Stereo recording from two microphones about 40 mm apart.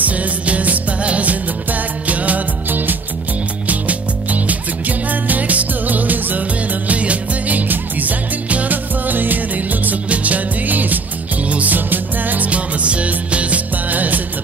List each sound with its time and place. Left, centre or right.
0.0 s music: right
12.4 s music: right